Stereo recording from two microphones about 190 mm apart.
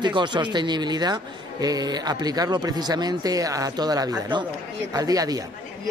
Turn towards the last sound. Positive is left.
turn(degrees=-20)  # may be behind; listen again after turning